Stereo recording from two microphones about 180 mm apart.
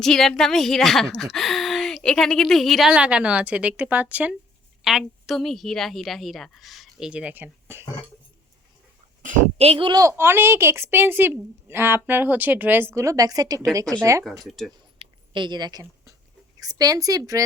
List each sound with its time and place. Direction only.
0.0 s a woman's voice: centre (ahead or behind)
9.2 s a woman's voice: 40° right (ahead or behind); by 14.3 s 15° right (ahead or behind)
14.4 s a woman's voice: centre (ahead or behind)
15.3 s a woman's voice: 25° right (ahead or behind)